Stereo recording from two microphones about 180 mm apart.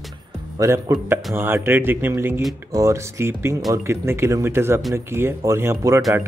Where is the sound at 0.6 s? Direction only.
15° right (ahead or behind).